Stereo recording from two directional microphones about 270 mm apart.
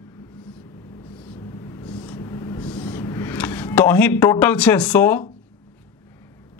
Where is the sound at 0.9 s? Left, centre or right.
Centre.